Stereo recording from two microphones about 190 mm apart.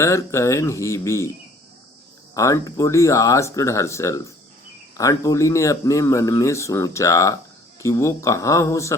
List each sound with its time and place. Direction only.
0.0 s speech: 15° left (ahead or behind)
2.3 s speech: 15° left (ahead or behind)